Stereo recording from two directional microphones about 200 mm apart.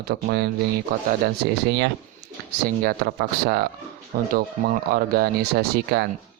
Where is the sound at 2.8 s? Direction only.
50° right (ahead or behind).